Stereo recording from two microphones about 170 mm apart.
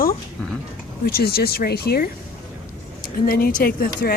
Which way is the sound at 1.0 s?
65° left (ahead or behind).